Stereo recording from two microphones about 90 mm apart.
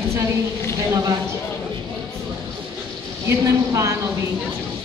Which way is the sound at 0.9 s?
45° right (ahead or behind).